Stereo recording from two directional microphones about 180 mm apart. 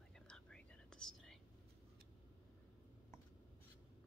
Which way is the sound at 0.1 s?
5° left (ahead or behind).